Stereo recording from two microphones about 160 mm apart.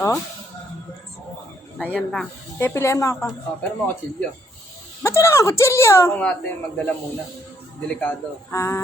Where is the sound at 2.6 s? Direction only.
15° left (ahead or behind).